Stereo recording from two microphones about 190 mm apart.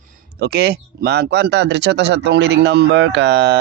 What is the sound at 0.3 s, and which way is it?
Speech, 55° right (ahead or behind).